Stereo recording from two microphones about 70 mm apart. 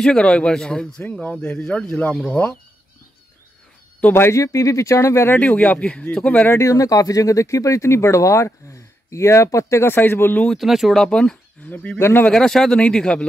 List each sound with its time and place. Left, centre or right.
0.0 s speech: centre
4.1 s speech: left
5.3 s speech: left
6.5 s speech: left
10.5 s speech: centre
11.6 s speech: left
12.0 s speech: left
12.3 s speech: centre